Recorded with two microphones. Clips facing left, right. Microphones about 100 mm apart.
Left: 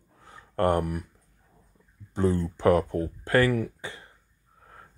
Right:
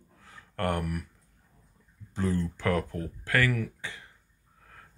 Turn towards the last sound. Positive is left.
turn(degrees=30)  # may be behind; listen again after turning